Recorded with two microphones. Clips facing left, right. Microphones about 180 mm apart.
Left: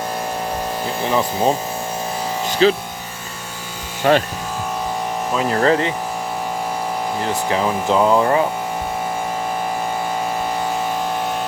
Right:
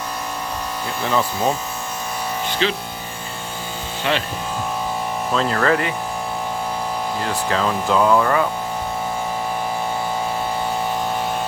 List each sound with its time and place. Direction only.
1.0 s speech: 20° left (ahead or behind)
2.5 s speech: 40° left (ahead or behind)
4.1 s speech: 40° left (ahead or behind)
5.3 s speech: 15° left (ahead or behind)
5.5 s speech: 25° left (ahead or behind)
7.2 s speech: 20° left (ahead or behind)